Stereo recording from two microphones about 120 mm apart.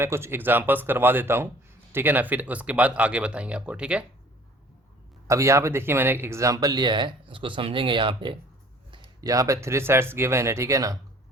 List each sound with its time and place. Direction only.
0.0 s speech: 20° right (ahead or behind)
5.3 s speech: 25° right (ahead or behind); by 8.4 s 45° right (ahead or behind)
9.2 s speech: 30° right (ahead or behind)